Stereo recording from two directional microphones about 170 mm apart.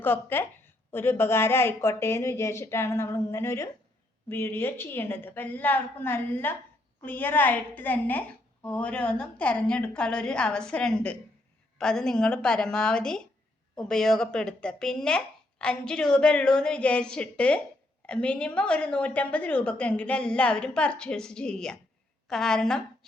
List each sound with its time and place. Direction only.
0.0 s a woman's voice: 10° left (ahead or behind)